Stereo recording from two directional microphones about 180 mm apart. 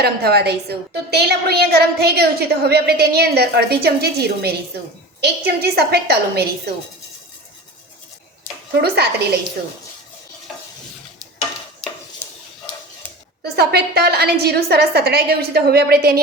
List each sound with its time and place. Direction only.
0.0 s a woman's voice: 60° right (ahead or behind)
8.8 s a woman's voice: 65° right (ahead or behind)
13.4 s a woman's voice: 65° right (ahead or behind)